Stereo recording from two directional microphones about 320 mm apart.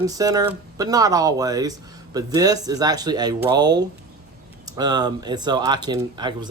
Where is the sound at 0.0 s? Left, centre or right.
Centre.